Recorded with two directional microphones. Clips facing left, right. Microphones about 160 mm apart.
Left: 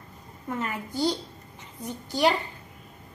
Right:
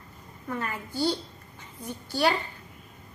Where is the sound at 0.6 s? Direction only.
20° left (ahead or behind).